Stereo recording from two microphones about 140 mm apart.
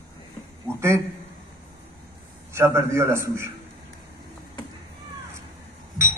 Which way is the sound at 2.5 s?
20° right (ahead or behind).